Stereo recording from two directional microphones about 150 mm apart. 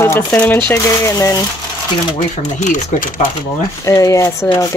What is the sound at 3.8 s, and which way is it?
Speech, 20° left (ahead or behind).